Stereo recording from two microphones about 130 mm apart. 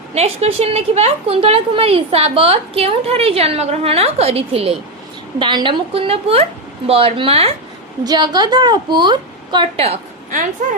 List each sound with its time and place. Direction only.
0.1 s a woman's voice: 55° right (ahead or behind)
5.4 s a woman's voice: 35° right (ahead or behind)
8.0 s a woman's voice: 30° right (ahead or behind)